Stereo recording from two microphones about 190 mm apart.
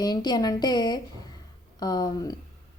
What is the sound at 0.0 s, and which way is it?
A woman's voice, 20° left (ahead or behind).